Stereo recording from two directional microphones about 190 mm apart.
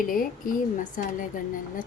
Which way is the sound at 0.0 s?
45° left (ahead or behind).